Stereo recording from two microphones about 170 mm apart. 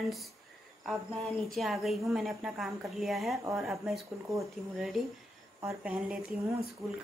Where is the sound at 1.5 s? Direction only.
Centre (ahead or behind).